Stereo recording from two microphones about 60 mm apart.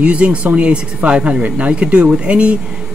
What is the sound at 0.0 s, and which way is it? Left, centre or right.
Speech, right.